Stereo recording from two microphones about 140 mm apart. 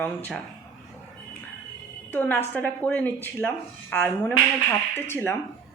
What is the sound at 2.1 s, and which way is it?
Speech, 15° left (ahead or behind).